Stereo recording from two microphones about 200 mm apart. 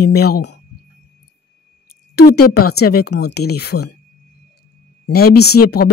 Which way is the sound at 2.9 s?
55° left (ahead or behind).